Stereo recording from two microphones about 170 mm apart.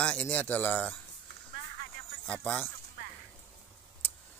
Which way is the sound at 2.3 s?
10° left (ahead or behind).